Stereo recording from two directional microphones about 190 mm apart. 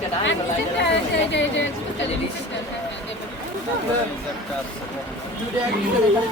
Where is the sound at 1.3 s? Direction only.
75° left (ahead or behind).